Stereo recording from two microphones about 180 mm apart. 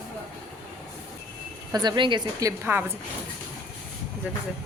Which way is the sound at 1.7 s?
25° right (ahead or behind).